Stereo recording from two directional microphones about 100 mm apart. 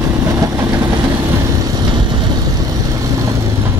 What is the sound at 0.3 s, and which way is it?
Vehicle, 35° right (ahead or behind).